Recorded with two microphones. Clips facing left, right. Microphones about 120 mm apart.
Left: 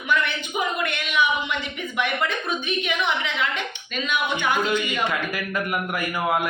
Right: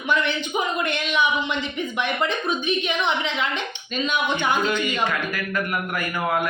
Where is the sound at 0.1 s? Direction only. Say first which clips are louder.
Right 1 dB; 25° right (ahead or behind).